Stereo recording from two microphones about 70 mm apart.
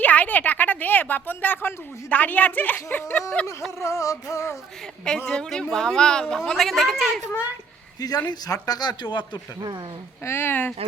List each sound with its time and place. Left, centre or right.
0.0 s a woman's voice: left
3.8 s music: left
5.0 s a woman's voice: centre
8.6 s speech: left
10.2 s speech: left